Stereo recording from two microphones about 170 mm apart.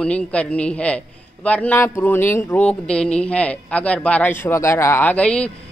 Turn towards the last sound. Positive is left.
turn(degrees=5)  # may be behind; listen again after turning